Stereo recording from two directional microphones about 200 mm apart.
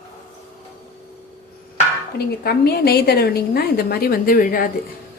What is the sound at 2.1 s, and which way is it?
A woman's voice, 50° left (ahead or behind).